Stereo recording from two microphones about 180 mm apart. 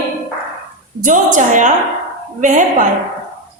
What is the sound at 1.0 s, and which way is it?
A woman's voice, 45° right (ahead or behind).